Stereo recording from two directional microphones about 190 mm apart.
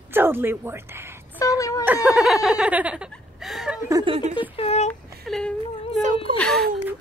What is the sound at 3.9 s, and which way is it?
Speech, 25° right (ahead or behind).